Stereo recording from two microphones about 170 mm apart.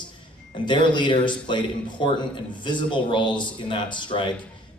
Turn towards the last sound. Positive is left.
turn(degrees=30)  # may be behind; listen again after turning